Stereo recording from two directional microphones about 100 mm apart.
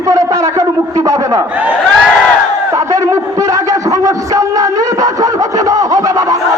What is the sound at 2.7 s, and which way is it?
Music, 35° right (ahead or behind).